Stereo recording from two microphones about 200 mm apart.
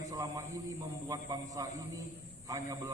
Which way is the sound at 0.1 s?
15° right (ahead or behind).